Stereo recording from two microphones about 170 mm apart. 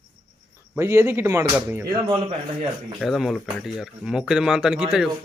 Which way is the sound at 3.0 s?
Centre (ahead or behind).